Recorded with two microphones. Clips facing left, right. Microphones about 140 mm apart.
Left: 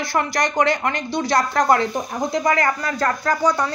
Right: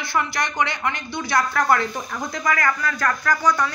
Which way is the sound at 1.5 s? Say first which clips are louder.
Left 3 dB; 25° left (ahead or behind).